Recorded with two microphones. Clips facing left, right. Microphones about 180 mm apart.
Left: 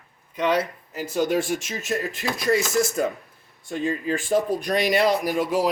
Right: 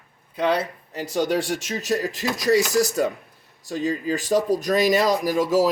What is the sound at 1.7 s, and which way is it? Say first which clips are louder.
Speech: right 3 dB; 35° right (ahead or behind).